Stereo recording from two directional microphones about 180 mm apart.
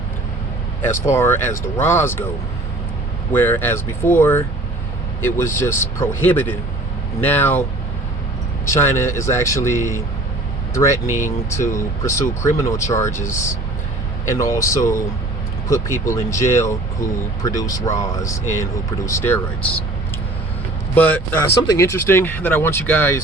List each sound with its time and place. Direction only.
0.8 s speech: 15° left (ahead or behind)
3.3 s speech: 10° left (ahead or behind)
8.6 s speech: 15° left (ahead or behind)
11.0 s speech: 40° left (ahead or behind)
11.4 s speech: 15° left (ahead or behind)
20.9 s speech: 10° left (ahead or behind)